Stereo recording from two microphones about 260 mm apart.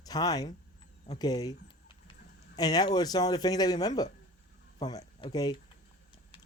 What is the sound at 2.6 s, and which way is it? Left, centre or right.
Speech, centre.